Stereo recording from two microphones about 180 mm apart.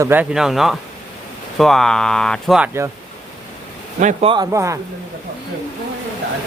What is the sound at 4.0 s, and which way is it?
Speech, 40° right (ahead or behind).